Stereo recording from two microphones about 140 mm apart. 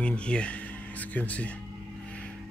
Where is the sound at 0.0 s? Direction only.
10° left (ahead or behind).